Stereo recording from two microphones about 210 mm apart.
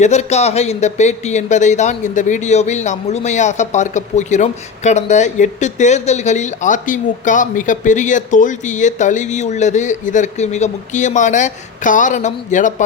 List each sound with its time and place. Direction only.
0.0 s speech: 30° left (ahead or behind)